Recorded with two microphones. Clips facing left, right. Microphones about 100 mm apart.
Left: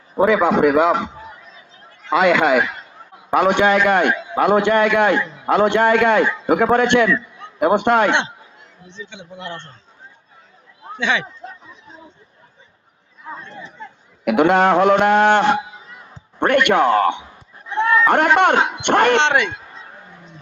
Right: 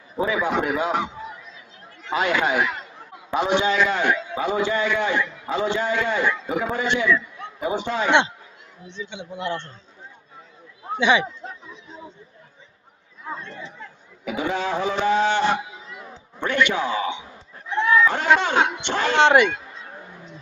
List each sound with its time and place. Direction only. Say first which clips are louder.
0.2 s speech: left 8 dB; 80° left
2.0 s a man's voice: left 7 dB; 90° left
3.2 s a man's voice: left 6 dB; 60° left (ahead or behind)
9.0 s speech: right 5 dB; 5° right (ahead or behind)
11.0 s speech: right 2 dB; 5° right (ahead or behind)
14.3 s a man's voice: left 11 dB; 75° left (ahead or behind)
19.2 s speech: right 2 dB; 5° right (ahead or behind)